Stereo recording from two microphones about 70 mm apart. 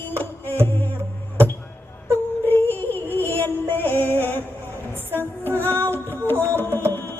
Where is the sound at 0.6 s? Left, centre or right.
Left.